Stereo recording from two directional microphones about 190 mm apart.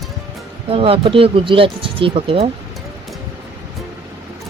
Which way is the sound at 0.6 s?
30° right (ahead or behind).